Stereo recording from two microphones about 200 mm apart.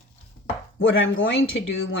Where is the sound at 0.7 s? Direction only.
70° left (ahead or behind).